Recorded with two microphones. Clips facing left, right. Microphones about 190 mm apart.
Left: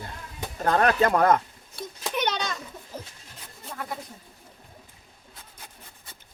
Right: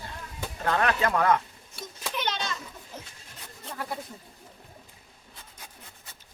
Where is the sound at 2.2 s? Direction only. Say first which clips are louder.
Left 4 dB; 50° left (ahead or behind).